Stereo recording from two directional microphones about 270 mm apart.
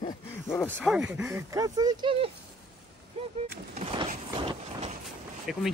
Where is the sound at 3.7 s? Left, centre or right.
Right.